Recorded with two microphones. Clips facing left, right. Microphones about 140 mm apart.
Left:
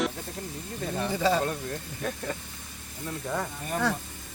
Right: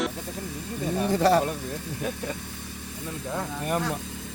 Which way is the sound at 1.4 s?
10° right (ahead or behind).